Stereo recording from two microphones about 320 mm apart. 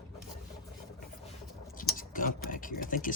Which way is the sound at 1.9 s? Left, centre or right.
Left.